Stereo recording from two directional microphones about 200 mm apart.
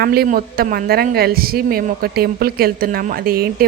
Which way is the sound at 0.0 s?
50° right (ahead or behind).